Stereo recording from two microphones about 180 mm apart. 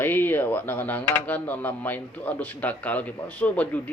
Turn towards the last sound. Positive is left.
turn(degrees=10)  # may be behind; listen again after turning